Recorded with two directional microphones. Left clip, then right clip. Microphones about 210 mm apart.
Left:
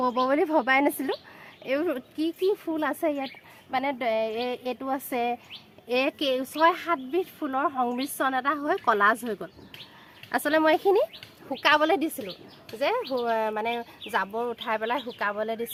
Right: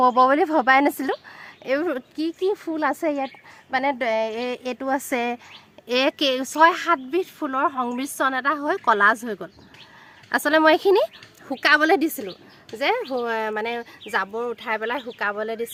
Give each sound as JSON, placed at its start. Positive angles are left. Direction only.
{"t": 0.0, "sound": "speech", "side_deg": -35}